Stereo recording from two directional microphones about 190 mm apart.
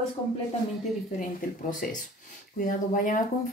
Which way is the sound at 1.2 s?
45° left (ahead or behind).